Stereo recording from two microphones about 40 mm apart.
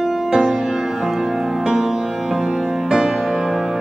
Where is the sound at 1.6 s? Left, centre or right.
Centre.